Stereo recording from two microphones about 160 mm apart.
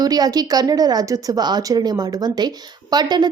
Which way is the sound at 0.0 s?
25° right (ahead or behind).